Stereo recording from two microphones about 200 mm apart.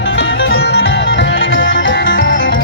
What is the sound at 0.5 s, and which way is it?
Music, 55° left (ahead or behind).